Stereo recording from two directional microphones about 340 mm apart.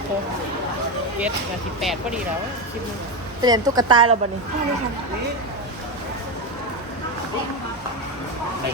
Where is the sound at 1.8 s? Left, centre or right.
Centre.